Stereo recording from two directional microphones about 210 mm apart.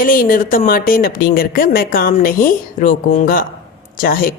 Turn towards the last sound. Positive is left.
turn(degrees=45)  # may be behind; listen again after turning